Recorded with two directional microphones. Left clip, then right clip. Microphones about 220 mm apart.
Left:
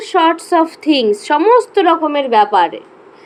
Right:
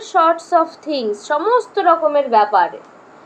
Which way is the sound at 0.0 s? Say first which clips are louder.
Left 2 dB; 35° left (ahead or behind).